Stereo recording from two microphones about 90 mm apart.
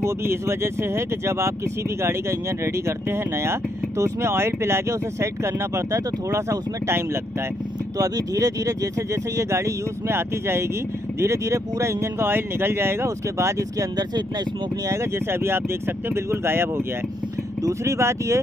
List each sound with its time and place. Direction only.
0.0 s speech: 30° right (ahead or behind)
8.0 s speech: 40° right (ahead or behind)
14.9 s speech: 30° right (ahead or behind)